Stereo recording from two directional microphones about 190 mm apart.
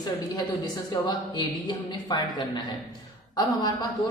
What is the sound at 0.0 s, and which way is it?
Speech, 20° left (ahead or behind).